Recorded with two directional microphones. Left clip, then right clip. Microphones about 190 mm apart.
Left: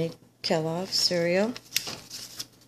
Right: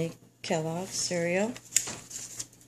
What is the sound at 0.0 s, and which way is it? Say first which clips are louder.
Speech: left 4 dB; 15° left (ahead or behind).